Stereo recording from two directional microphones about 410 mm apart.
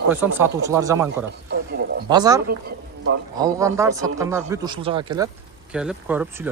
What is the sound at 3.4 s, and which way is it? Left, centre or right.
Speech, centre.